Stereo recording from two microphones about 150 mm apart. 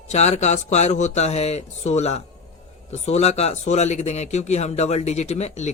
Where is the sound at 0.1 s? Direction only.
50° left (ahead or behind).